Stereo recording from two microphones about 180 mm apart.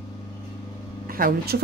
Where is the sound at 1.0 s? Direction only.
55° right (ahead or behind).